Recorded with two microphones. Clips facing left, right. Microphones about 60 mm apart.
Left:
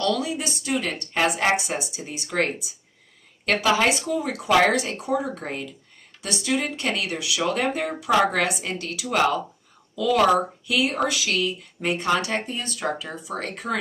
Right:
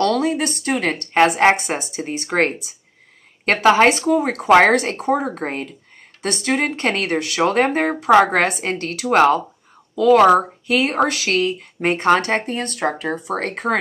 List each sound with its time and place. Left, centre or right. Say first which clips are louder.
0.0 s speech: right 7 dB; right